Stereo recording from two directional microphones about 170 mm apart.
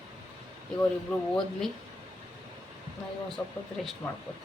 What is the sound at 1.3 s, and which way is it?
Speech, centre (ahead or behind).